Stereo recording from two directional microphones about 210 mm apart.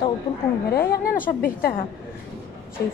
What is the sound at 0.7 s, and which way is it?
A woman's voice, 45° left (ahead or behind).